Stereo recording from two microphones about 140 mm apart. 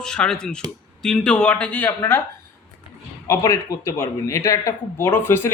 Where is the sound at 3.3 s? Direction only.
20° left (ahead or behind).